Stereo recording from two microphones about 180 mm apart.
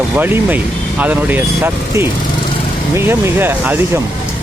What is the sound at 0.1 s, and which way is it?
Speech, 10° right (ahead or behind).